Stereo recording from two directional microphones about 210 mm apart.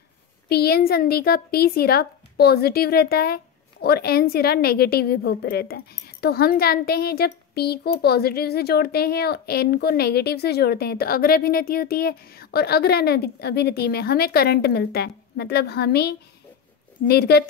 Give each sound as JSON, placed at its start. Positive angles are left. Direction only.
{"t": 0.5, "sound": "a woman's voice", "side_deg": 50}